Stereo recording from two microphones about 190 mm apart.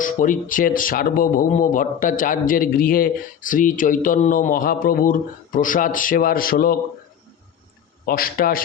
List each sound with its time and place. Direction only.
0.0 s a man's voice: 45° left (ahead or behind)
8.0 s a man's voice: 50° left (ahead or behind)